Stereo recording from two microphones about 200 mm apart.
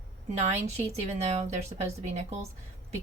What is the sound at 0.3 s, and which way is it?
A woman's voice, 35° right (ahead or behind).